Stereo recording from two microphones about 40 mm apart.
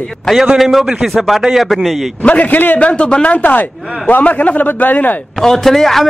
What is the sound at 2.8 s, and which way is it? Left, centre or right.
Speech, left.